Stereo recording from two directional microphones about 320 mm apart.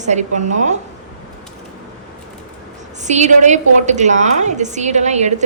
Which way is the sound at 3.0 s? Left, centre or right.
Right.